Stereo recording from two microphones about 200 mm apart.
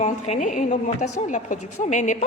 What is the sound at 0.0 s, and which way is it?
A woman's voice, 35° left (ahead or behind).